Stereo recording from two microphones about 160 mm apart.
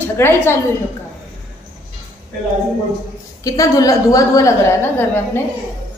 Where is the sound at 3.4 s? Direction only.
20° left (ahead or behind).